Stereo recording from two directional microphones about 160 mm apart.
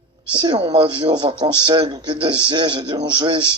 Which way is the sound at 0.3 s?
25° right (ahead or behind).